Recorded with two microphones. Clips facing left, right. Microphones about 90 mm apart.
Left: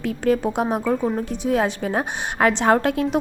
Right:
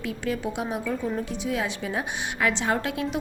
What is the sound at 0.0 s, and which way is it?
A woman's voice, 45° left (ahead or behind).